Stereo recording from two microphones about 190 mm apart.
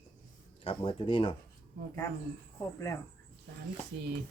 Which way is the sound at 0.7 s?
25° left (ahead or behind).